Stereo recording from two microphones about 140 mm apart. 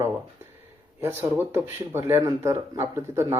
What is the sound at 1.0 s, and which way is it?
Speech, 15° right (ahead or behind).